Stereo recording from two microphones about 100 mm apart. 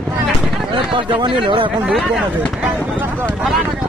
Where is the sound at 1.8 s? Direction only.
5° right (ahead or behind).